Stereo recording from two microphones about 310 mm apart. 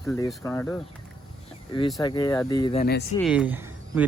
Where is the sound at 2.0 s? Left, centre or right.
Centre.